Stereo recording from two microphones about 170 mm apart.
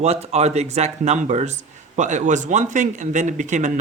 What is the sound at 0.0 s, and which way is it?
Speech, 40° right (ahead or behind).